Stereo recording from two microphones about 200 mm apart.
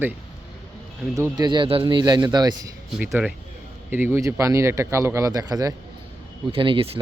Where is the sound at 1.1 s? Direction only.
20° right (ahead or behind).